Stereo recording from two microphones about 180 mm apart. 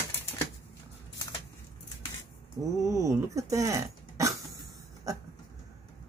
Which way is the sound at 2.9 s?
15° right (ahead or behind).